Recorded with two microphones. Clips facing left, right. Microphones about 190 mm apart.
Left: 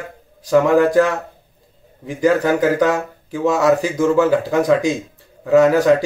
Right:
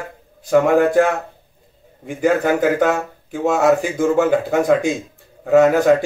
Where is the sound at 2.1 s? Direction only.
35° left (ahead or behind).